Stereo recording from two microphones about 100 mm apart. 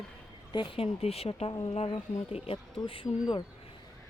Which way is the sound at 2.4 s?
65° left (ahead or behind).